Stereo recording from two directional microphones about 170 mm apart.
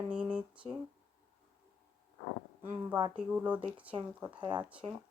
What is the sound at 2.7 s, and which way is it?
Speech, 20° right (ahead or behind).